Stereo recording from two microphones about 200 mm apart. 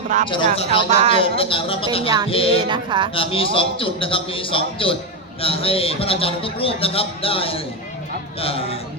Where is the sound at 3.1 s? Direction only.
25° left (ahead or behind).